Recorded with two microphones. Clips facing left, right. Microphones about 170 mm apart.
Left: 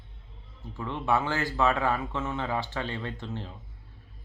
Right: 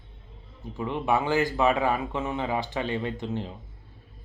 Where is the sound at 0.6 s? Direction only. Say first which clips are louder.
Right 4 dB; 15° right (ahead or behind).